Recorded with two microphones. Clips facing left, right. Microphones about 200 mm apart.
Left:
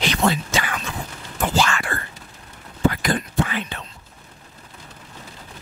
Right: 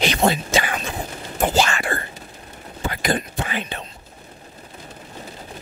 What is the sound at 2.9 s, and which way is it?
Speech, 20° right (ahead or behind).